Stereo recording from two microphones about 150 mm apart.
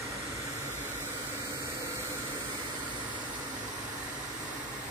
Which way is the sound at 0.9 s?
15° right (ahead or behind).